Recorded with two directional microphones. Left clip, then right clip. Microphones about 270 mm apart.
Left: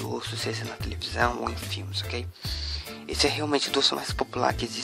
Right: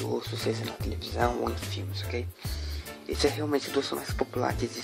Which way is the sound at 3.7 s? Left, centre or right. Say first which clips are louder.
Left 6 dB; left.